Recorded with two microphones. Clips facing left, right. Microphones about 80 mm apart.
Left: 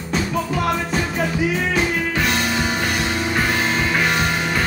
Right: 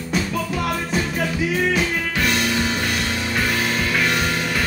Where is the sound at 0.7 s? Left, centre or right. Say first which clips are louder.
Left 1 dB; left.